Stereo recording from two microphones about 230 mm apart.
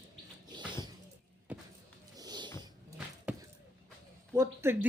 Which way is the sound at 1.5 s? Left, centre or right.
Centre.